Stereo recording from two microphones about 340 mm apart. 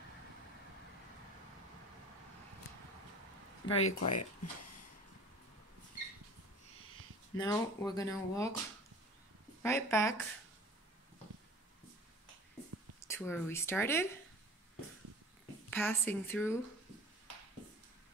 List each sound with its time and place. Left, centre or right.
3.6 s speech: centre
4.0 s speech: left
7.3 s speech: centre
9.6 s speech: centre
13.0 s speech: centre
15.7 s speech: centre